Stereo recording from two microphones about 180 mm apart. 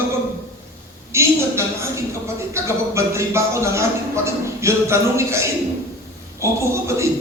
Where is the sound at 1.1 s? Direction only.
15° right (ahead or behind).